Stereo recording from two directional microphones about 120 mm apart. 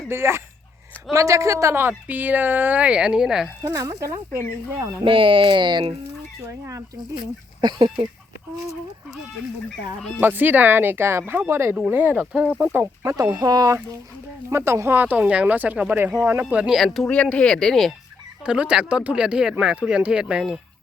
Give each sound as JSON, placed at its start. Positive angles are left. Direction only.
{"t": 0.1, "sound": "speech", "side_deg": -20}
{"t": 3.6, "sound": "speech", "side_deg": -30}
{"t": 5.0, "sound": "speech", "side_deg": -45}
{"t": 7.6, "sound": "speech", "side_deg": -40}
{"t": 10.2, "sound": "speech", "side_deg": -15}
{"t": 13.0, "sound": "speech", "side_deg": -30}
{"t": 14.5, "sound": "speech", "side_deg": -20}
{"t": 18.4, "sound": "speech", "side_deg": -10}